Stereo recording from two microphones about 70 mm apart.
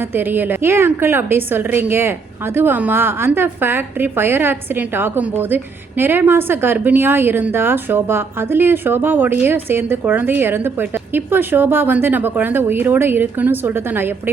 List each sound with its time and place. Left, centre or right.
0.1 s a woman's voice: right